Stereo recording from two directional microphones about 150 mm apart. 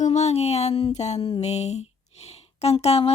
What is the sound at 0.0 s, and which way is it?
Speech, 50° left (ahead or behind).